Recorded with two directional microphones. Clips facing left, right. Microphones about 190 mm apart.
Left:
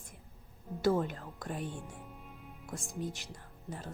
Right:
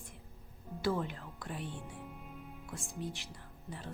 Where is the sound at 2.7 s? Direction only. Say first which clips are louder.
Left 4 dB; 40° left (ahead or behind).